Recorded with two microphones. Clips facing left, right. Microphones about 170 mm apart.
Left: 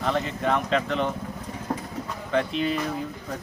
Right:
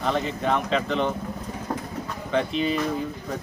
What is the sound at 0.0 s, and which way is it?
Speech, centre (ahead or behind).